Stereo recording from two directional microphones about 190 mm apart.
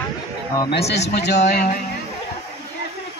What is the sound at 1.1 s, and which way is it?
Speech, 65° left (ahead or behind).